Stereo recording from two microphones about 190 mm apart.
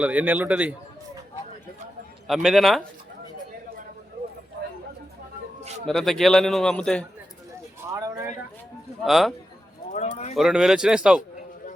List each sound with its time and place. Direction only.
0.0 s a man's voice: 10° right (ahead or behind)
2.2 s a man's voice: centre (ahead or behind)
5.8 s a man's voice: centre (ahead or behind)
7.8 s speech: 15° right (ahead or behind)
9.0 s a man's voice: centre (ahead or behind)
9.9 s a sound: 35° left (ahead or behind)
10.3 s a man's voice: 5° right (ahead or behind)